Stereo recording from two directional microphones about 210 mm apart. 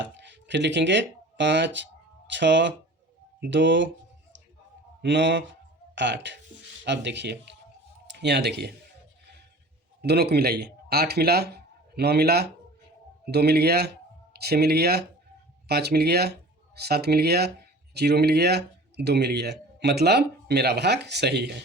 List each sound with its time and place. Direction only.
0.2 s speech: 55° right (ahead or behind)
10.0 s speech: 50° right (ahead or behind)